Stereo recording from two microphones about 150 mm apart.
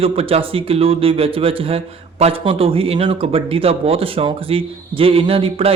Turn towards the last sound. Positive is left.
turn(degrees=-40)  # may be behind; listen again after turning